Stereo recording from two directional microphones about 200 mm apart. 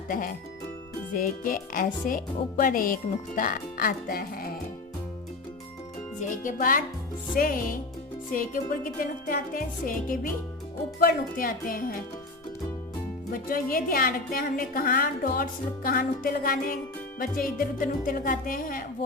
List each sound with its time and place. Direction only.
0.1 s speech: 45° left (ahead or behind)
6.1 s speech: 40° left (ahead or behind)
13.3 s speech: 45° left (ahead or behind)